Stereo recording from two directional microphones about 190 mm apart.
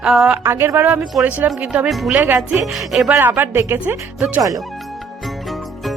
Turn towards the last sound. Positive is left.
turn(degrees=-10)  # may be behind; listen again after turning